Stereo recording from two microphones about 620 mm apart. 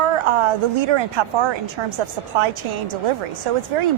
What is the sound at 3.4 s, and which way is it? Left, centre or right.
Speech, right.